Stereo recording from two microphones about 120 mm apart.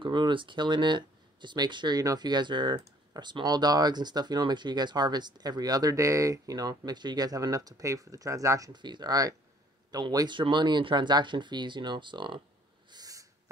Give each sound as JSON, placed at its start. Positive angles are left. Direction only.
{"t": 0.0, "sound": "speech", "side_deg": -40}
{"t": 12.9, "sound": "owl", "side_deg": -30}